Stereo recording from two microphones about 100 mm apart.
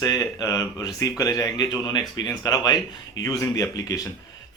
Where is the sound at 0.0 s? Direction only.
35° left (ahead or behind).